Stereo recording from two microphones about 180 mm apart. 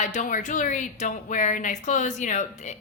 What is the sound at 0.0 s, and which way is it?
A woman's voice, 45° left (ahead or behind).